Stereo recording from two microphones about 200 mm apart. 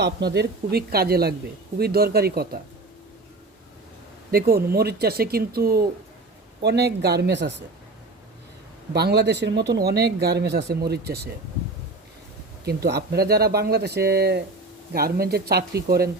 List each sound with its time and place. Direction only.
0.0 s speech: 55° right (ahead or behind)
4.3 s speech: 50° right (ahead or behind)
8.9 s speech: 55° right (ahead or behind)
12.6 s speech: 55° right (ahead or behind)